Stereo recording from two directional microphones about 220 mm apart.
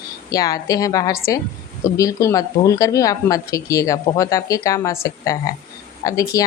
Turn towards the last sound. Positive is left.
turn(degrees=15)  # may be behind; listen again after turning